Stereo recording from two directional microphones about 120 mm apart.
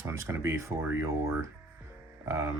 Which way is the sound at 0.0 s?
25° right (ahead or behind).